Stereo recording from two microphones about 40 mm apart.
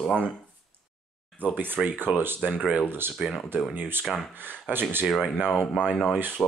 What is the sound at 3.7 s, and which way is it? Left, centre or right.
Speech, right.